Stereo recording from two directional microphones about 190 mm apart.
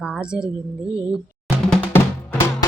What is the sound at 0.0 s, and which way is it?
Speech, 5° right (ahead or behind).